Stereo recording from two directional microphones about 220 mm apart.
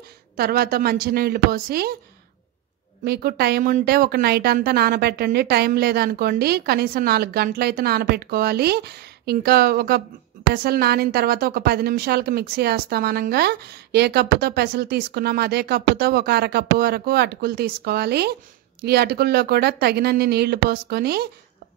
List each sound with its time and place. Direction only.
0.4 s a woman's voice: 45° right (ahead or behind)
3.0 s a woman's voice: 45° right (ahead or behind)